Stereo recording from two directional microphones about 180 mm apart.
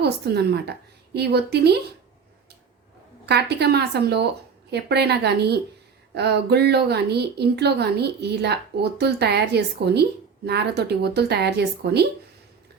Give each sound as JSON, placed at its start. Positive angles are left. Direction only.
{"t": 0.0, "sound": "speech", "side_deg": -65}
{"t": 3.2, "sound": "a woman's voice", "side_deg": -65}